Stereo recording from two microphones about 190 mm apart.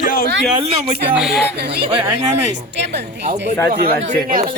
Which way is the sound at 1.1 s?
Centre (ahead or behind).